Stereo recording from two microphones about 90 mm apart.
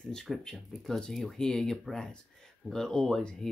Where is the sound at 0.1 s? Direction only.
5° left (ahead or behind).